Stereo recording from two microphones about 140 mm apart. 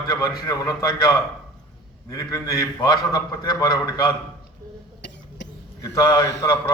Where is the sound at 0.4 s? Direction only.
25° left (ahead or behind).